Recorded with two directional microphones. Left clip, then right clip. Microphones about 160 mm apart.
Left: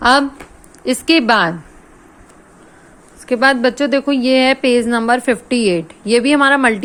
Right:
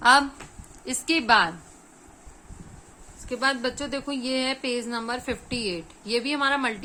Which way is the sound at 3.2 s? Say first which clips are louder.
Left 13 dB; 45° left (ahead or behind).